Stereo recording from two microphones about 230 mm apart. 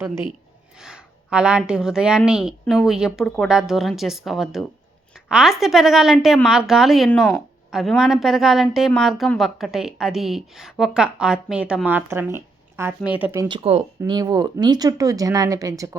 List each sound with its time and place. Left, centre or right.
0.8 s a woman's voice: centre